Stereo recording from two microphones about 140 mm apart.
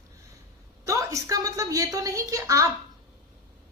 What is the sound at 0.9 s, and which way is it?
A woman's voice, 25° right (ahead or behind).